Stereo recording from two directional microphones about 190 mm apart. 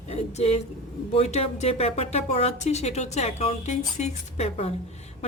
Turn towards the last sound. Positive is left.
turn(degrees=35)  # may be behind; listen again after turning